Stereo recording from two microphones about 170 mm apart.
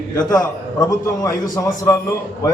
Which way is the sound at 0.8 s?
20° left (ahead or behind).